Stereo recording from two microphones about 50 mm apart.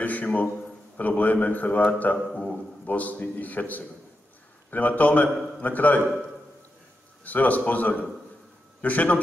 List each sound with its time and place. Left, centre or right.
0.0 s a sound: left
0.9 s a man's voice: left
7.2 s a man's voice: left